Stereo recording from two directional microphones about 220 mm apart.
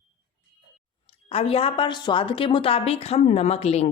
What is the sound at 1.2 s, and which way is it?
A woman's voice, 25° left (ahead or behind).